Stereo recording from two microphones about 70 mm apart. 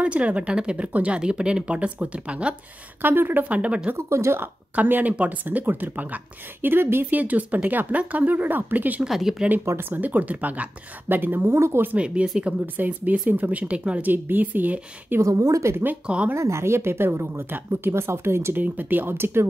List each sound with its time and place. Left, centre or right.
0.0 s speech: centre
3.0 s speech: right
3.9 s a woman's voice: right
4.7 s speech: right
9.0 s speech: centre
9.7 s speech: right
11.5 s speech: right
11.8 s speech: centre
15.1 s speech: right
15.7 s speech: right
16.3 s a woman's voice: right
18.6 s a woman's voice: right